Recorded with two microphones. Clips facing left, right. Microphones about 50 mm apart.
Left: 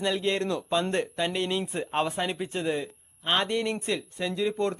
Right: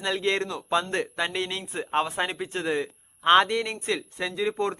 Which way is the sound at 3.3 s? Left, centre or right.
Right.